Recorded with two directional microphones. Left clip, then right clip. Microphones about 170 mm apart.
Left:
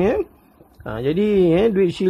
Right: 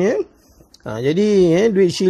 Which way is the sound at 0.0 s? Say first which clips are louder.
Right 1 dB; 15° right (ahead or behind).